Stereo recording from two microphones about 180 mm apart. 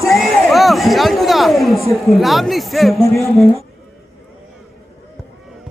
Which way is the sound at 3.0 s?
15° left (ahead or behind).